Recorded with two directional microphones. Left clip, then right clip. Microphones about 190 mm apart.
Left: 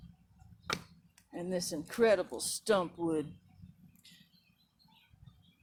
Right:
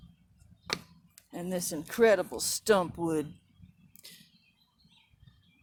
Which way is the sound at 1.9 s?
45° right (ahead or behind).